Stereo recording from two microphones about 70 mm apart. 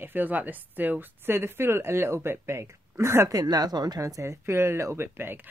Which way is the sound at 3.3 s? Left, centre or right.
Right.